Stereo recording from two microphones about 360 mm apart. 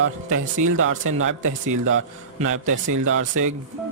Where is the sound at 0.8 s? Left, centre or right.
Right.